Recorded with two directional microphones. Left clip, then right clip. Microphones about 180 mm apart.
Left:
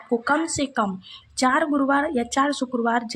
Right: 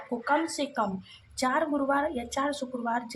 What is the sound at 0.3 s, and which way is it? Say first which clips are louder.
A woman's voice: left 1 dB; 25° left (ahead or behind).